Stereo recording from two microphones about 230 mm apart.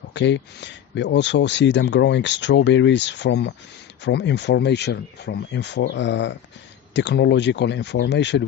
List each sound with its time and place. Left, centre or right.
0.1 s speech: left